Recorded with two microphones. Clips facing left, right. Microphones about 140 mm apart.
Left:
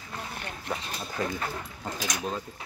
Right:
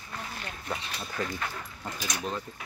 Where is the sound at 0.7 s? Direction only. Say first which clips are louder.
Left 1 dB; 20° left (ahead or behind).